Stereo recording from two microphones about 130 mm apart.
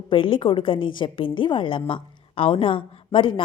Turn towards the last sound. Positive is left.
turn(degrees=40)  # may be behind; listen again after turning